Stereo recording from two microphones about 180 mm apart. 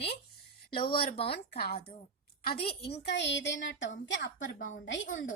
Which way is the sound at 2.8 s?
65° left (ahead or behind).